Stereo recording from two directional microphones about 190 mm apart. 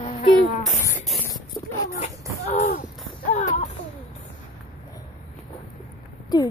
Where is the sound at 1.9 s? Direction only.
40° left (ahead or behind).